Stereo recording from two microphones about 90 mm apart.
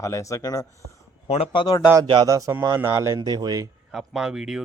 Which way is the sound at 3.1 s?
50° right (ahead or behind).